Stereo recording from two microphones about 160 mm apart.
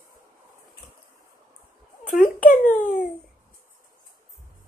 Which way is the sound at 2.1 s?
55° left (ahead or behind).